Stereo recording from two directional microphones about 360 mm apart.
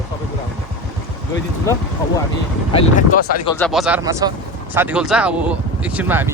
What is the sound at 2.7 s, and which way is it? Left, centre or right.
Speech, left.